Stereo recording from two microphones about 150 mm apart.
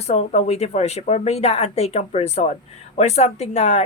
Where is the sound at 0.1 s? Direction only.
50° left (ahead or behind).